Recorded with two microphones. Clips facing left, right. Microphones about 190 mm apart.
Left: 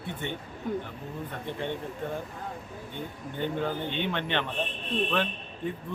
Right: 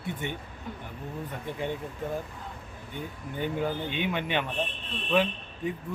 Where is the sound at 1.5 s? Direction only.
10° right (ahead or behind).